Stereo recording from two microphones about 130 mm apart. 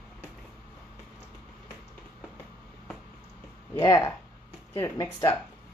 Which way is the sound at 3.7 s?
25° left (ahead or behind).